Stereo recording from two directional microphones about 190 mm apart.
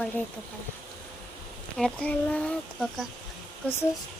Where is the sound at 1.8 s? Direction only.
5° left (ahead or behind).